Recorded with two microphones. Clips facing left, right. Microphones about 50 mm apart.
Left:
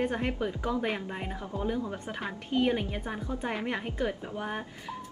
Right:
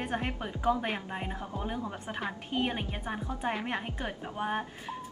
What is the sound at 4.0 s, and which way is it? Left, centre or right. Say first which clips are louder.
Speech: left 3 dB; centre.